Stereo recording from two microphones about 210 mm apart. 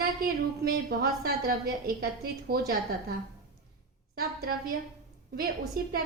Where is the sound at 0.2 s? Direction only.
45° right (ahead or behind).